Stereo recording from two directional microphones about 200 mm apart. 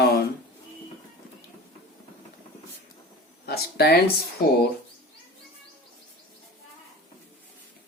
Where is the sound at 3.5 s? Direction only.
55° left (ahead or behind).